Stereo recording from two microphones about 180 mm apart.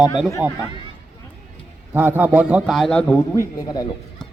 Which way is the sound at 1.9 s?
10° right (ahead or behind).